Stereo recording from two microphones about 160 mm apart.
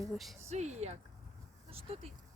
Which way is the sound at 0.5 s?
45° right (ahead or behind).